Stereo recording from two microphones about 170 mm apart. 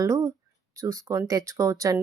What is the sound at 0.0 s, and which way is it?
Speech, 20° right (ahead or behind).